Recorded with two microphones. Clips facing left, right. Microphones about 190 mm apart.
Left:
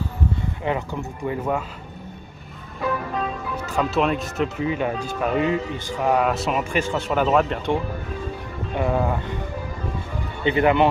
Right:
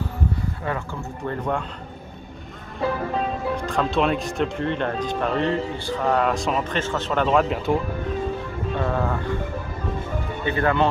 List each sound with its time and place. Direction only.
0.7 s speech: 15° left (ahead or behind)
3.5 s speech: 5° left (ahead or behind)
8.7 s speech: 15° left (ahead or behind)
10.4 s speech: 20° left (ahead or behind)